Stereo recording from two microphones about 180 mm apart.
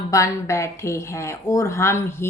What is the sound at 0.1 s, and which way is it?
Speech, 15° left (ahead or behind).